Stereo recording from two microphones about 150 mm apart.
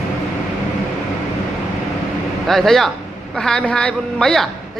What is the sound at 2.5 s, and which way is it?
A man's voice, centre (ahead or behind).